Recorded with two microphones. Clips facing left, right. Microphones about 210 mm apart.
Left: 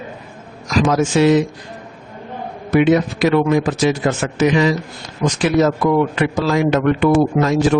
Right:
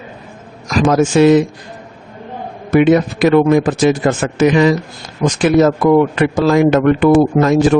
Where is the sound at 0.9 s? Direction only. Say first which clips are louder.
Right 5 dB; 50° right (ahead or behind).